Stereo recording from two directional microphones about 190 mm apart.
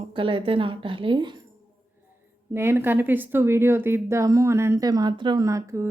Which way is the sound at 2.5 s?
10° right (ahead or behind).